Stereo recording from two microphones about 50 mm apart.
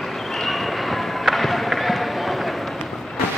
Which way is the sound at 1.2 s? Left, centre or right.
Centre.